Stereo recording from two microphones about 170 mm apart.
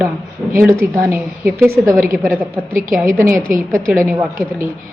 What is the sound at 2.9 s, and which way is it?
A woman's voice, 15° right (ahead or behind).